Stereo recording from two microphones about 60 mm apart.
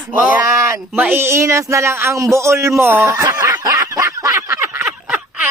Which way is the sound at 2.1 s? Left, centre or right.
Right.